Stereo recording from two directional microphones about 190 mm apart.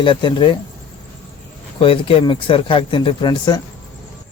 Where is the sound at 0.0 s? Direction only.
25° left (ahead or behind).